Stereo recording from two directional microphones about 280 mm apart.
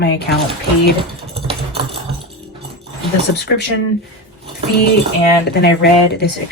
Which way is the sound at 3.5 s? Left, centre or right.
Left.